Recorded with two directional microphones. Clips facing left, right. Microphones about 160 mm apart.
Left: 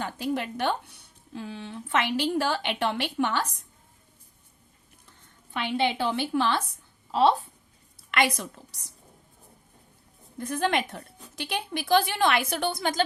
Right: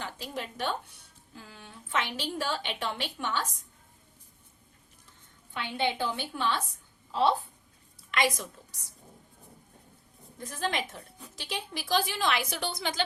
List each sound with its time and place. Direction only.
0.2 s speech: 65° left (ahead or behind)
5.5 s speech: 90° left; by 6.6 s 70° left (ahead or behind)
8.1 s a woman's voice: 65° left (ahead or behind)
10.4 s a woman's voice: 65° left (ahead or behind)